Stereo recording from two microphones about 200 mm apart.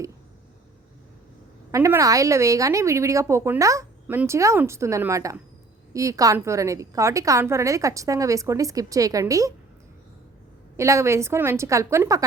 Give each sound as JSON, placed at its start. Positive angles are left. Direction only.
{"t": 1.7, "sound": "speech", "side_deg": -15}
{"t": 10.8, "sound": "speech", "side_deg": -15}